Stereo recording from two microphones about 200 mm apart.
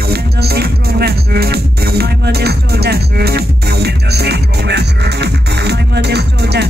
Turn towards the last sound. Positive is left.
turn(degrees=-55)  # may be behind; listen again after turning